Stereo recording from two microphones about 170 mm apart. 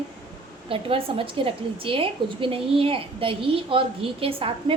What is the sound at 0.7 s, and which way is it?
A woman's voice, 30° right (ahead or behind).